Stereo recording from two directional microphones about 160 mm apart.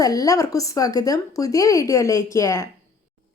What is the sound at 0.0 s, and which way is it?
A woman's voice, 20° left (ahead or behind).